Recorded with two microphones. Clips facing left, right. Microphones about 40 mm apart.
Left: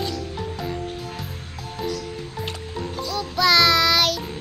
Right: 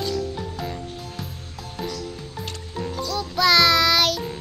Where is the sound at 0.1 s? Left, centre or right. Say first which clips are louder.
Right 2 dB; centre.